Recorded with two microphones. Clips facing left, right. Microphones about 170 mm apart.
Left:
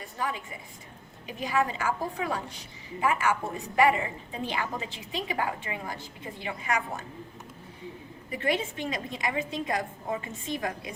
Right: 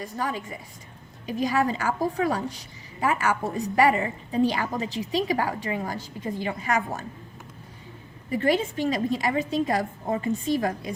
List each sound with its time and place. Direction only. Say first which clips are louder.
0.0 s a woman's voice: right 4 dB; 35° right (ahead or behind)
8.3 s a woman's voice: right 6 dB; 40° right (ahead or behind)